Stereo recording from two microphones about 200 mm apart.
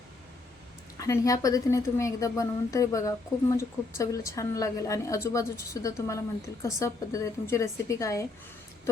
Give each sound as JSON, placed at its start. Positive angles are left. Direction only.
{"t": 0.9, "sound": "a woman's voice", "side_deg": 15}